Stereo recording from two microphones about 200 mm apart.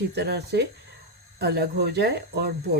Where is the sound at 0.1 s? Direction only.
55° right (ahead or behind).